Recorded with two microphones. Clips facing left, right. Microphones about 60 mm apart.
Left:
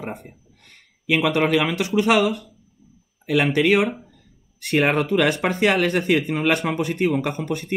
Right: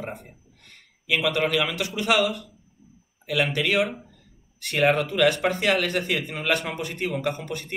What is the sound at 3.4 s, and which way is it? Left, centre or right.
Speech, left.